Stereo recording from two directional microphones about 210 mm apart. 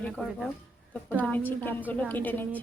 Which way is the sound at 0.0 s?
5° left (ahead or behind).